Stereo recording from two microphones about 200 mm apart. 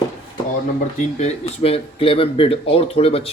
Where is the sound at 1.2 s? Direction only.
30° left (ahead or behind).